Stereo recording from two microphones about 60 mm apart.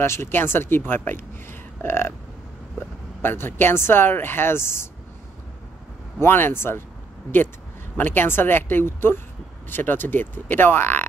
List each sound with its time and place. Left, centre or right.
0.0 s speech: left
3.2 s speech: left
6.1 s speech: left
8.0 s speech: left